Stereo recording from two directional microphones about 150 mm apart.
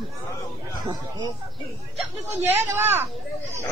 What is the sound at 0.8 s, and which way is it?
Speech, 30° right (ahead or behind).